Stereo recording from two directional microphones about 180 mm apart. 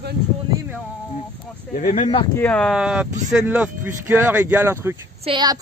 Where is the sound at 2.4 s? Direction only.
5° left (ahead or behind).